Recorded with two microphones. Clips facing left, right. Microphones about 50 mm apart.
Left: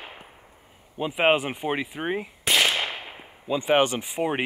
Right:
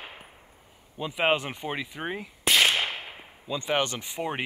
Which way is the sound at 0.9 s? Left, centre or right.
Left.